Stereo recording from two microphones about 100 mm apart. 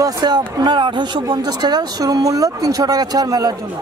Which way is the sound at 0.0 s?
45° right (ahead or behind).